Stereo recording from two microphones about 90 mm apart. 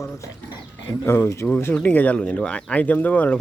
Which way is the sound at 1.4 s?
20° left (ahead or behind).